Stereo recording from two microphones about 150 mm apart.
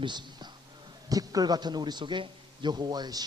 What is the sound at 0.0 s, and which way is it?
A man's voice, 30° right (ahead or behind).